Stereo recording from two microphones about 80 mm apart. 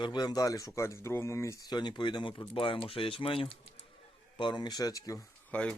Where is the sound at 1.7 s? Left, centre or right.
Left.